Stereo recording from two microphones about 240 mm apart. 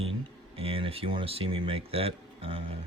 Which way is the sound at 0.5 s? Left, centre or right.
Right.